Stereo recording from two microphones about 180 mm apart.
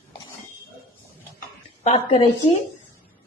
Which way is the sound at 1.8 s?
35° left (ahead or behind).